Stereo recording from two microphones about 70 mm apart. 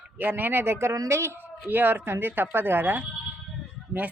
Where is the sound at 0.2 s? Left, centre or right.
Right.